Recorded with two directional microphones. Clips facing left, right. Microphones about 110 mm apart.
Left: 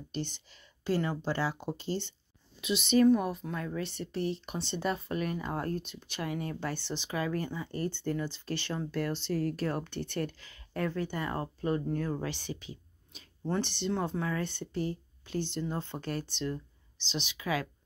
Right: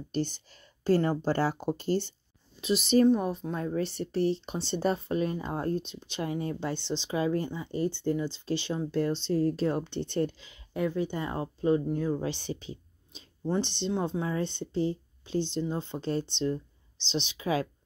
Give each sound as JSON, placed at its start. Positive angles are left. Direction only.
{"t": 0.1, "sound": "speech", "side_deg": -40}
{"t": 3.1, "sound": "speech", "side_deg": -25}